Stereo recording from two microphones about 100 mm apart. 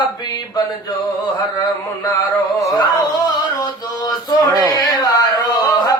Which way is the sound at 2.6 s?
35° left (ahead or behind).